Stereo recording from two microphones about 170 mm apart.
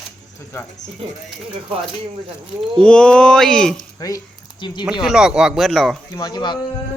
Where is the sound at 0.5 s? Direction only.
15° left (ahead or behind).